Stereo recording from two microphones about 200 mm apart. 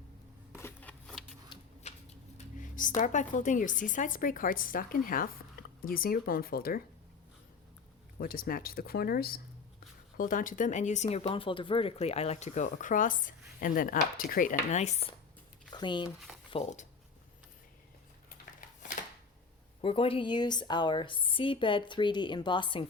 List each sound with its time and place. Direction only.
0.6 s a sound: 5° left (ahead or behind)
1.5 s a sound: 25° left (ahead or behind)
2.6 s speech: 40° left (ahead or behind)
8.2 s speech: 45° left (ahead or behind)
15.7 s speech: 25° left (ahead or behind)
19.8 s a woman's voice: 25° left (ahead or behind)